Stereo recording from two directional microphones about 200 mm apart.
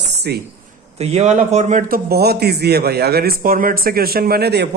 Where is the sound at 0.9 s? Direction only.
30° right (ahead or behind).